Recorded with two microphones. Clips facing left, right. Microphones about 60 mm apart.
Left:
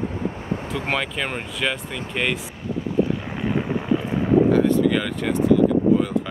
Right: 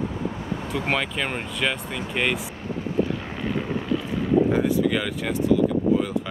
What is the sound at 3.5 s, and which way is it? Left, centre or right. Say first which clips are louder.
Boat: left 3 dB; centre.